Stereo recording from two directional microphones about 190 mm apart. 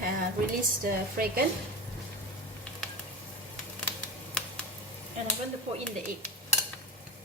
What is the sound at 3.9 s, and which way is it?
Typing, 5° left (ahead or behind).